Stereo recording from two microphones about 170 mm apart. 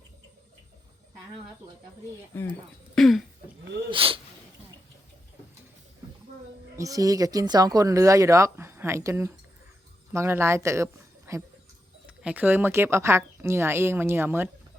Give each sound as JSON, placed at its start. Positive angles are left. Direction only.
{"t": 2.3, "sound": "speech", "side_deg": 15}
{"t": 2.9, "sound": "throat clearing", "side_deg": 0}
{"t": 3.9, "sound": "speech", "side_deg": -30}
{"t": 6.7, "sound": "speech", "side_deg": -20}